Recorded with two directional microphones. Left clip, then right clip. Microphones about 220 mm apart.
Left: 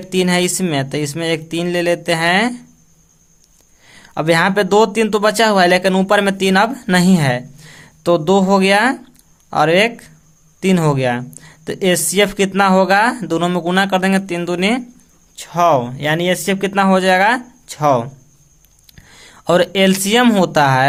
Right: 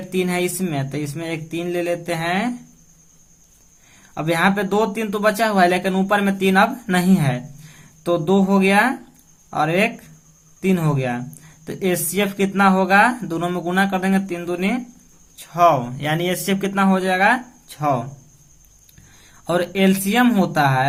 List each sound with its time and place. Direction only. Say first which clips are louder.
0.1 s speech: left 6 dB; 40° left (ahead or behind)
4.0 s speech: left 5 dB; 40° left (ahead or behind)
19.1 s speech: left 7 dB; 45° left (ahead or behind)